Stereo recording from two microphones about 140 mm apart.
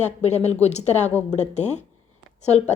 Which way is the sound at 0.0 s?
55° left (ahead or behind).